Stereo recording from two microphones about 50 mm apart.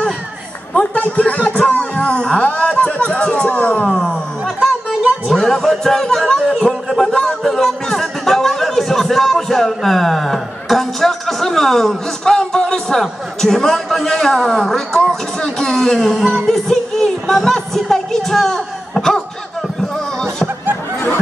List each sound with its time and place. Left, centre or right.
0.7 s speech: left
5.3 s a man's voice: centre